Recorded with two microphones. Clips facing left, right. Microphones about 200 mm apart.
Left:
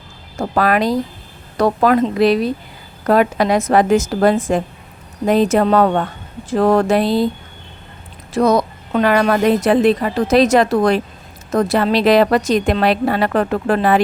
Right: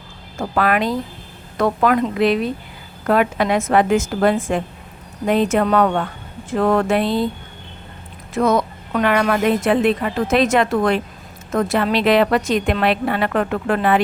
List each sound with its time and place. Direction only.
0.3 s speech: 40° left (ahead or behind)
8.3 s speech: 40° left (ahead or behind)